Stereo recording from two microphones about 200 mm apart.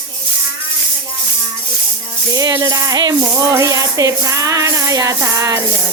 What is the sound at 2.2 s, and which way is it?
Speech, 15° right (ahead or behind).